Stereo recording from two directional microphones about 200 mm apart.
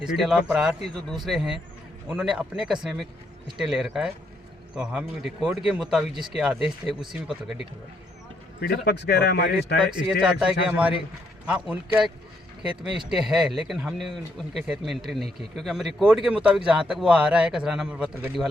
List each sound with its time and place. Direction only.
0.0 s speech: centre (ahead or behind)
8.6 s speech: 50° left (ahead or behind)
9.8 s speech: centre (ahead or behind)